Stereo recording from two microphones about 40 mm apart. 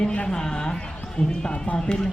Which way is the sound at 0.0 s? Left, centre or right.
Left.